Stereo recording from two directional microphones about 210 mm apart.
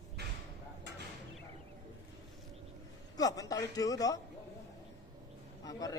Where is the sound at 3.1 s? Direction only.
15° left (ahead or behind).